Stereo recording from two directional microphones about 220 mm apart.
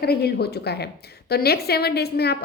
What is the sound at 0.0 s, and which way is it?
A woman's voice, 45° left (ahead or behind).